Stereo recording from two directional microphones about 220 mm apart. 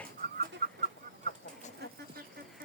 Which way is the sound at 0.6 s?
45° right (ahead or behind).